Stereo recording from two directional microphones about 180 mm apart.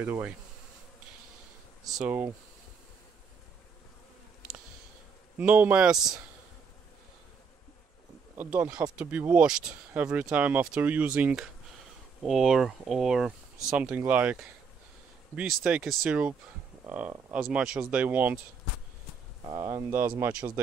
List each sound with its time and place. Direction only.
0.0 s speech: 10° right (ahead or behind)
1.9 s speech: 5° right (ahead or behind)
5.4 s speech: 10° right (ahead or behind)
8.4 s speech: 10° right (ahead or behind)
19.5 s speech: 25° right (ahead or behind)
20.2 s speech: 10° right (ahead or behind)